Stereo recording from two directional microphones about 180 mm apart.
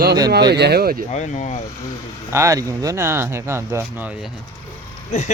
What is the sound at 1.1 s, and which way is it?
Speech, 40° left (ahead or behind).